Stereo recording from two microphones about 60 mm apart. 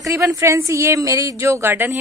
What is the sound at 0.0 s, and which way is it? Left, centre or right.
A woman's voice, right.